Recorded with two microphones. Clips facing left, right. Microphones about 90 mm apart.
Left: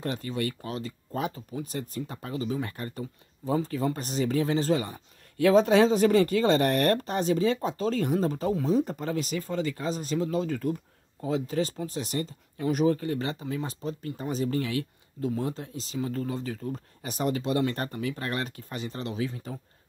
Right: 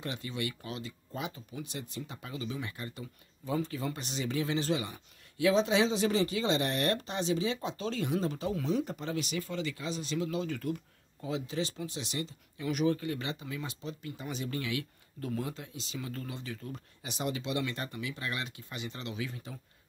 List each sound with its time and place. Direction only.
0.0 s speech: 40° left (ahead or behind)
15.1 s speech: 25° left (ahead or behind)